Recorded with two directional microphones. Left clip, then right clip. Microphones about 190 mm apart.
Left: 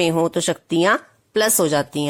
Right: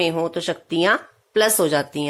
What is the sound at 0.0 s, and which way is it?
Speech, 35° left (ahead or behind).